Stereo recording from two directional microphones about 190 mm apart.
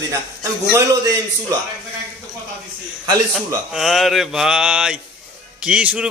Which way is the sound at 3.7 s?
Centre (ahead or behind).